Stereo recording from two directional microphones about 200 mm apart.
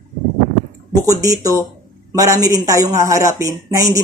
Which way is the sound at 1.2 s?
15° right (ahead or behind).